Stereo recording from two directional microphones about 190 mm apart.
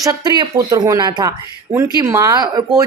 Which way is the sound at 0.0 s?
20° right (ahead or behind).